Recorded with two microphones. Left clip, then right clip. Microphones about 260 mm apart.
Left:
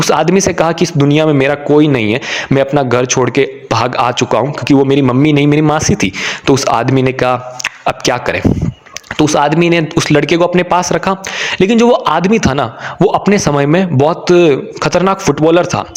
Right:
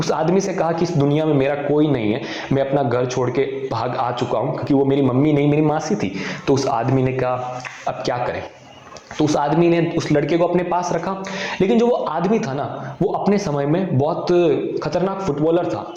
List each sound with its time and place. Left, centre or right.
0.0 s a man's voice: left